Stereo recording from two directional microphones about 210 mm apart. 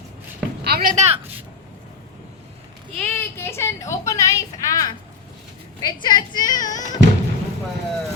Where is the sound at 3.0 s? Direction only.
10° left (ahead or behind).